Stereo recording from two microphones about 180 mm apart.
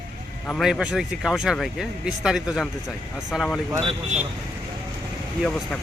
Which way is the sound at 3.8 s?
35° right (ahead or behind).